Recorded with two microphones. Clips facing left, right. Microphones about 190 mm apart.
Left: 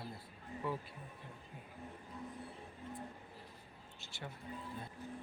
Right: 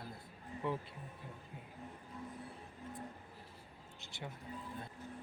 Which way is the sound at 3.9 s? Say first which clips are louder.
Right 1 dB; 20° right (ahead or behind).